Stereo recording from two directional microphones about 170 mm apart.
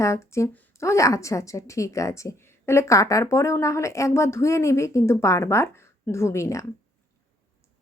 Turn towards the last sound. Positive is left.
turn(degrees=15)  # may be behind; listen again after turning